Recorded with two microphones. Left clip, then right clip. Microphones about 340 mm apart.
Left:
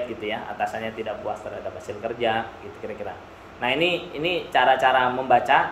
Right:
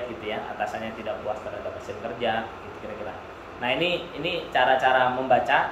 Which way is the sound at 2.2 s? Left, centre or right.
Centre.